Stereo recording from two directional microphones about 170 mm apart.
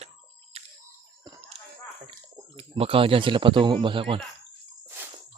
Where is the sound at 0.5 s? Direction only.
35° right (ahead or behind).